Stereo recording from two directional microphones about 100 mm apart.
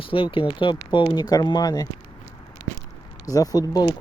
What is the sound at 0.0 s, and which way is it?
Speech, 60° left (ahead or behind).